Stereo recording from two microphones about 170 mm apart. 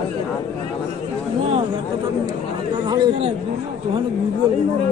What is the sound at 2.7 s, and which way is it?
Chatter, 25° right (ahead or behind).